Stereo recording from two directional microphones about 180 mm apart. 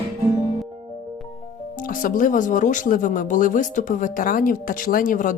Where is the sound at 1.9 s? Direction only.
50° left (ahead or behind).